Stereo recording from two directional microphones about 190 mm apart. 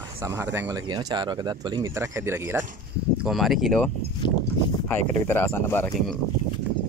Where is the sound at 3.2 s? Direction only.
Centre (ahead or behind).